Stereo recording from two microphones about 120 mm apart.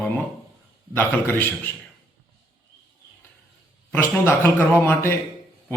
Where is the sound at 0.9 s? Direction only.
15° left (ahead or behind).